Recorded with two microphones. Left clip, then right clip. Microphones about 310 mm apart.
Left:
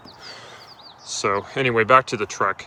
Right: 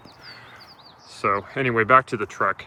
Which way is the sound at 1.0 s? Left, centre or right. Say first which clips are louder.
Left 1 dB; centre.